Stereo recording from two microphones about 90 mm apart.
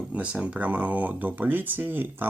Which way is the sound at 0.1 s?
15° right (ahead or behind).